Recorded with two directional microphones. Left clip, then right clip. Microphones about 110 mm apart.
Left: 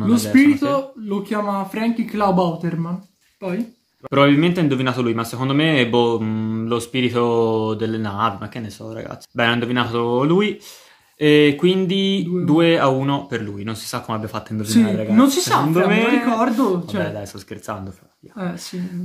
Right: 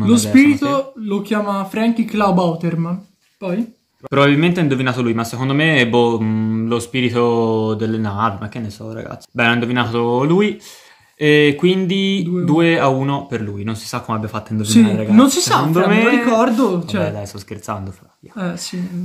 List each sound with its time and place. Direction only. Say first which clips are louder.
0.3 s speech: right 1 dB; 35° right (ahead or behind)
4.1 s speech: right 1 dB; 10° left (ahead or behind)
14.6 s speech: right 4 dB; 35° right (ahead or behind)
14.9 s speech: right 3 dB; 5° left (ahead or behind)
15.1 s speech: right 3 dB; 35° right (ahead or behind)
15.7 s speech: right 3 dB; 10° left (ahead or behind)
16.3 s speech: right 4 dB; 35° right (ahead or behind)
17.0 s speech: right 3 dB; 15° left (ahead or behind)
18.4 s speech: right 4 dB; 40° right (ahead or behind)